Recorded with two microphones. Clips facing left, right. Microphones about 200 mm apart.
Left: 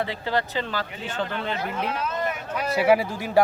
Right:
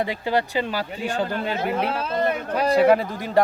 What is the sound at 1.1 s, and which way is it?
Speech, 40° right (ahead or behind).